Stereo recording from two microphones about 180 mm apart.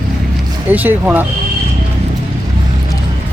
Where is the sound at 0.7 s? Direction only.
10° right (ahead or behind).